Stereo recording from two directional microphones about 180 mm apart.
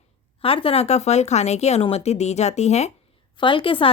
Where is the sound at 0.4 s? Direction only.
30° left (ahead or behind).